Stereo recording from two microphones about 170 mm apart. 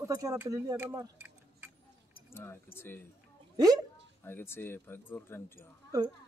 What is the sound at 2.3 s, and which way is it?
Speech, 15° left (ahead or behind).